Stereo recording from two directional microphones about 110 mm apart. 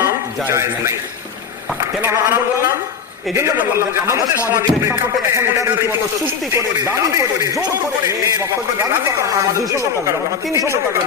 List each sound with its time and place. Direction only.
0.5 s a man's voice: 25° right (ahead or behind)
8.8 s a man's voice: 20° right (ahead or behind)